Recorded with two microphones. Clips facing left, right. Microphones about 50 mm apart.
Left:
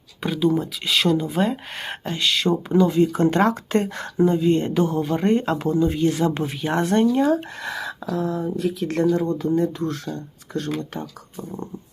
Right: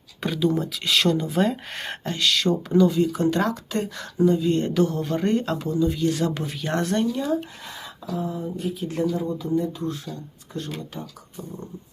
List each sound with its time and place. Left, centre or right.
0.2 s speech: centre
2.9 s speech: left
5.5 s speech: left
6.6 s speech: centre
6.8 s speech: left
7.6 s a sound: left
8.1 s speech: left
9.1 s speech: left
11.3 s speech: left